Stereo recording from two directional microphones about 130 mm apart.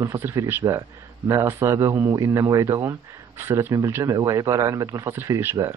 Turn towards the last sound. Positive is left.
turn(degrees=-20)  # may be behind; listen again after turning